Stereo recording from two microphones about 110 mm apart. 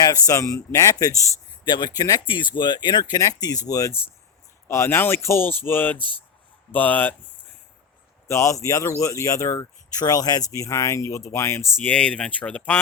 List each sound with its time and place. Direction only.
0.3 s speech: 30° left (ahead or behind)
1.6 s speech: 40° left (ahead or behind)
2.2 s speech: 45° left (ahead or behind); by 6.0 s 20° left (ahead or behind)
6.0 s speech: 45° right (ahead or behind)
6.7 s speech: 15° left (ahead or behind)
8.3 s speech: 30° left (ahead or behind)
11.9 s speech: 10° left (ahead or behind)